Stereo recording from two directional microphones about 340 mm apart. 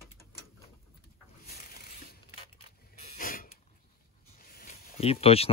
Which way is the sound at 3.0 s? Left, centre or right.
Left.